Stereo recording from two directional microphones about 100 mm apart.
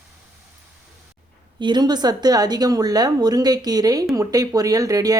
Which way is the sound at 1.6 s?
50° right (ahead or behind).